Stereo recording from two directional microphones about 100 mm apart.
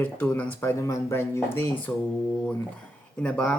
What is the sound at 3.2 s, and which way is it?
Speech, 10° left (ahead or behind).